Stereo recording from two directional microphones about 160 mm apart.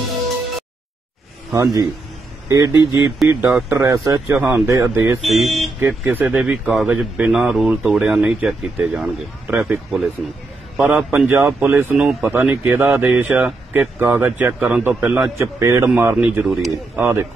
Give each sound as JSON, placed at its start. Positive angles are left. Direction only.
{"t": 1.5, "sound": "a man's voice", "side_deg": -20}
{"t": 5.2, "sound": "speech", "side_deg": 0}
{"t": 5.8, "sound": "a man's voice", "side_deg": -10}
{"t": 9.8, "sound": "a man's voice", "side_deg": 0}
{"t": 15.3, "sound": "a man's voice", "side_deg": -20}
{"t": 17.0, "sound": "a man's voice", "side_deg": -15}